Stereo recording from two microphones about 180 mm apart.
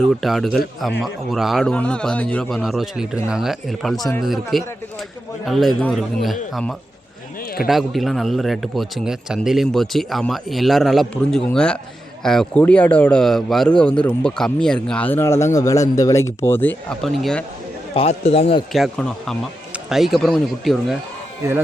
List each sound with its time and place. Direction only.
0.2 s a man's voice: centre (ahead or behind)
17.9 s a man's voice: 35° left (ahead or behind)
18.7 s a man's voice: centre (ahead or behind)